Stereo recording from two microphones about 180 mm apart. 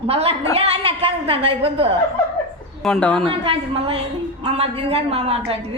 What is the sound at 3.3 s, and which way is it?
A woman's voice, 30° right (ahead or behind).